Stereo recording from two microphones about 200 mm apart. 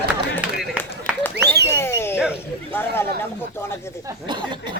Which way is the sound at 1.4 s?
55° right (ahead or behind).